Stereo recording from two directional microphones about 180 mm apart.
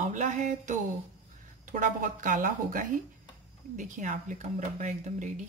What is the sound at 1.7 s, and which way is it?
Speech, 45° right (ahead or behind).